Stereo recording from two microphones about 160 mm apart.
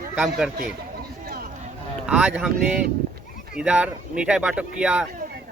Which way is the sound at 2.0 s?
5° right (ahead or behind).